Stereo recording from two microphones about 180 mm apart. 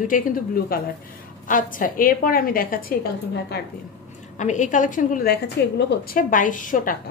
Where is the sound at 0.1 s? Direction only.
50° left (ahead or behind).